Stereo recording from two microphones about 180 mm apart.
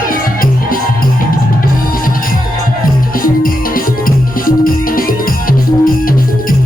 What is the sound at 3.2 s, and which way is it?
Music, 50° left (ahead or behind).